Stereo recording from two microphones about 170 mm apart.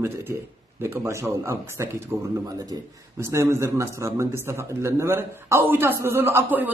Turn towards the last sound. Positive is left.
turn(degrees=-10)  # may be behind; listen again after turning